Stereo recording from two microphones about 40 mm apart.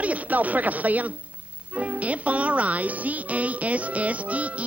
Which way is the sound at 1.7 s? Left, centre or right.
Right.